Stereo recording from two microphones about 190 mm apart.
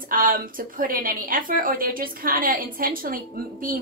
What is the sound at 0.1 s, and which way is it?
Speech, 45° right (ahead or behind).